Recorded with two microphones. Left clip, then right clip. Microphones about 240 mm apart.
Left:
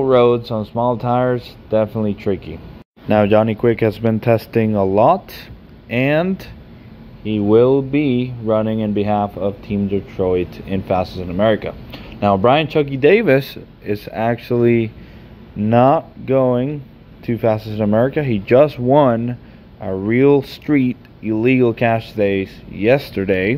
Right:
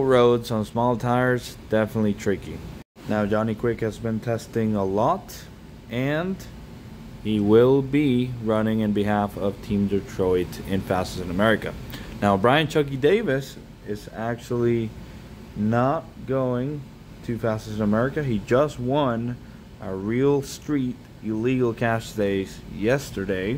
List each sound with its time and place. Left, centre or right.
0.0 s speech: centre
3.1 s speech: left
7.2 s speech: centre
13.2 s speech: left